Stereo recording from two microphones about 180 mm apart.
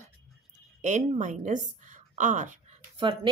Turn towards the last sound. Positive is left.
turn(degrees=-25)  # may be behind; listen again after turning